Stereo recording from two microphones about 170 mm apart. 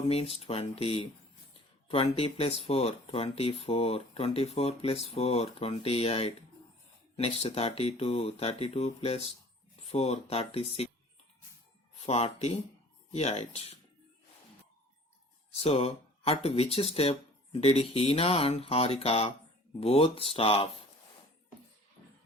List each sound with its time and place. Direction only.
0.0 s speech: 35° left (ahead or behind)
12.0 s speech: 40° left (ahead or behind)
15.5 s speech: 35° left (ahead or behind)